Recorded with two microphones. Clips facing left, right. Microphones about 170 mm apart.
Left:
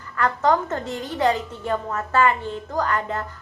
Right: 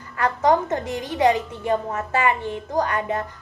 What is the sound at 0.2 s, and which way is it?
A woman's voice, 20° right (ahead or behind).